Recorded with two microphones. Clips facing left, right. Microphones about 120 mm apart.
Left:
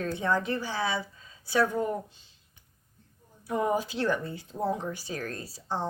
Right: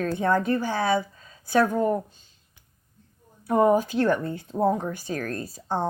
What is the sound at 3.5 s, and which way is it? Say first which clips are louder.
Speech: right 8 dB; 50° right (ahead or behind).